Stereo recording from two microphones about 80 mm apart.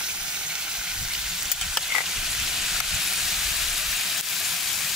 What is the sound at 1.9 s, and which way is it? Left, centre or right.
Frying, centre.